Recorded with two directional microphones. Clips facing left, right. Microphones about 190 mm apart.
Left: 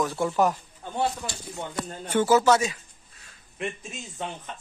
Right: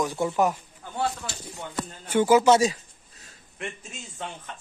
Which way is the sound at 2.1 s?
10° right (ahead or behind).